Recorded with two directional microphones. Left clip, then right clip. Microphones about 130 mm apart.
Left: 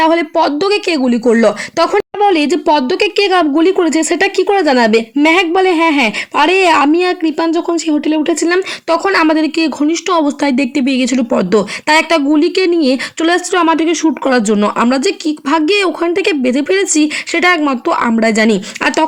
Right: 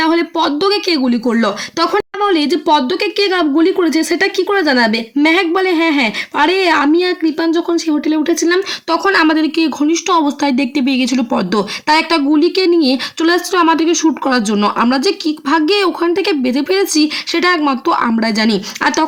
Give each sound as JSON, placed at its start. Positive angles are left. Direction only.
{"t": 0.0, "sound": "speech", "side_deg": 25}